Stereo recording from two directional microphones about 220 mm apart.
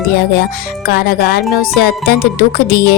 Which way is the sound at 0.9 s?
45° left (ahead or behind).